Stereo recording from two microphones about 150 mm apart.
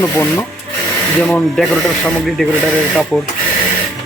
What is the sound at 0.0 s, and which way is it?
Speech, 15° left (ahead or behind).